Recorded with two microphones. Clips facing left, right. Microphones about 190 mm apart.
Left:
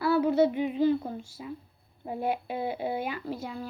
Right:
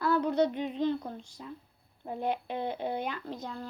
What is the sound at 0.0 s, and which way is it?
Speech, 5° left (ahead or behind).